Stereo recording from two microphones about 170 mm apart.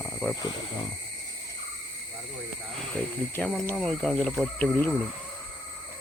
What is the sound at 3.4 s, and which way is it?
Speech, 10° left (ahead or behind).